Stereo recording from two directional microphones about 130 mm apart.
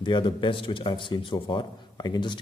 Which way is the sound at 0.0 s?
35° left (ahead or behind).